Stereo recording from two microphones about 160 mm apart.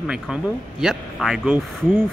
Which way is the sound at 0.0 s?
5° right (ahead or behind).